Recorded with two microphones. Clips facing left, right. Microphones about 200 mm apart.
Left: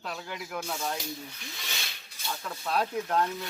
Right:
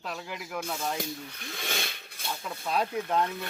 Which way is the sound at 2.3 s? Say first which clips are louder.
Even; 5° right (ahead or behind).